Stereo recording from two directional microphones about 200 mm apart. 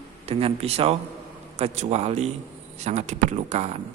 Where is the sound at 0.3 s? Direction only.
30° right (ahead or behind).